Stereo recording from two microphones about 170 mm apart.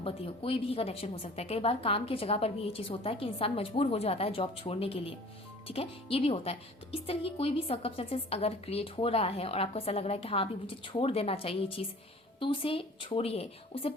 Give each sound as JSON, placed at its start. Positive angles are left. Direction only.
{"t": 0.0, "sound": "a woman's voice", "side_deg": 35}